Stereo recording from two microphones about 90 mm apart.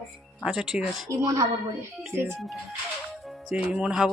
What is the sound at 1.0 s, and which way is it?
Speech, 40° right (ahead or behind).